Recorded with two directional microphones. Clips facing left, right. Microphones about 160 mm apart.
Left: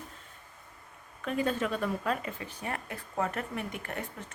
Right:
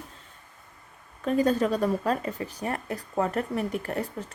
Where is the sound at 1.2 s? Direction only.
40° right (ahead or behind).